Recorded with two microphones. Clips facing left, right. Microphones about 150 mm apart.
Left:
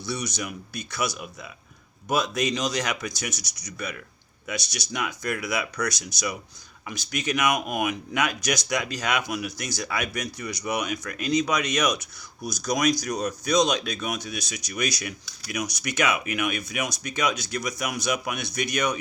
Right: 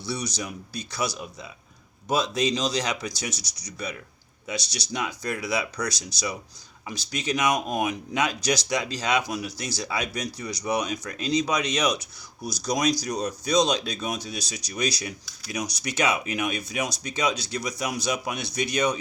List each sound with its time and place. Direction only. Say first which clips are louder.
0.0 s speech: even; 30° right (ahead or behind)